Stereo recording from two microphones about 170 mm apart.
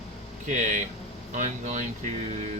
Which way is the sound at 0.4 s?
45° right (ahead or behind).